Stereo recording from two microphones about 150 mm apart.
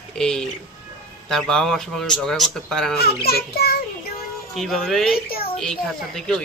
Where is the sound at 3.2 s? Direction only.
90° left.